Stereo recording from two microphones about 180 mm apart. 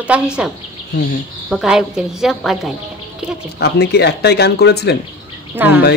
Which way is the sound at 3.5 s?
65° left (ahead or behind).